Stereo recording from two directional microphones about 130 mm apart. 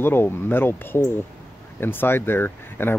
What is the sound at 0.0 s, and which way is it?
Speech, 15° left (ahead or behind).